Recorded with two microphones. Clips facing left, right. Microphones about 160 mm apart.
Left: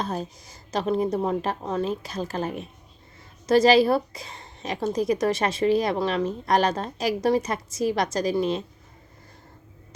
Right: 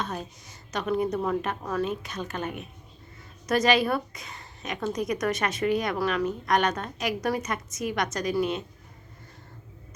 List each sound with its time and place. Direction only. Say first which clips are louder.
0.0 s a woman's voice: left 4 dB; 35° left (ahead or behind)